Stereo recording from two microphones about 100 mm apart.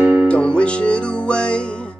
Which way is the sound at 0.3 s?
10° left (ahead or behind).